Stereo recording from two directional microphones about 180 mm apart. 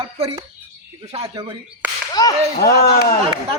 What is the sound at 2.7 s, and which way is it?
Speech, 55° left (ahead or behind).